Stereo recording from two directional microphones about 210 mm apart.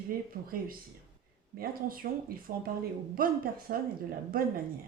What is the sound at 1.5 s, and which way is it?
Speech, 45° right (ahead or behind).